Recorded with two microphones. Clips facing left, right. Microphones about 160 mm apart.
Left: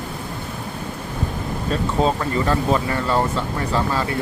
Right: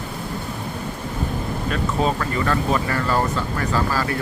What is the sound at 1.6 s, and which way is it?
Speech, 30° left (ahead or behind).